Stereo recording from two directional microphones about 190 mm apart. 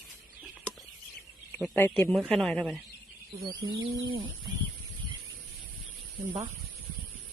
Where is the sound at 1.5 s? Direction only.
10° left (ahead or behind).